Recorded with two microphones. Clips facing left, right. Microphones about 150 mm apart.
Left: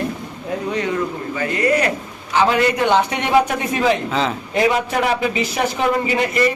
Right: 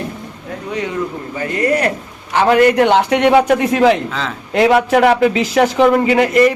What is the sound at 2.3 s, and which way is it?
A man's voice, 55° right (ahead or behind).